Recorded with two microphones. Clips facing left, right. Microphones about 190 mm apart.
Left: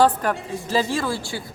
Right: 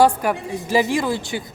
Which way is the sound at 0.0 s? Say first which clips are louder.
Right 2 dB; 10° right (ahead or behind).